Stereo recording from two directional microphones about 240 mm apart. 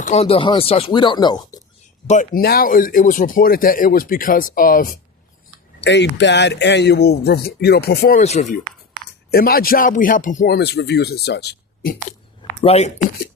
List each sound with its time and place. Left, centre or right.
0.0 s speech: left
2.0 s speech: left
5.8 s speech: left
8.2 s speech: left
9.3 s speech: left
12.4 s a sound: left